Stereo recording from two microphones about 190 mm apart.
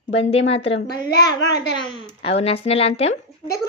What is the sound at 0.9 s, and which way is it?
Speech, 60° left (ahead or behind).